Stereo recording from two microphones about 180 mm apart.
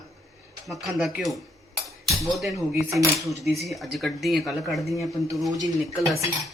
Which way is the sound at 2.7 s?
15° right (ahead or behind).